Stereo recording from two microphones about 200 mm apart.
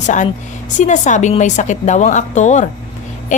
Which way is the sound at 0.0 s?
40° left (ahead or behind).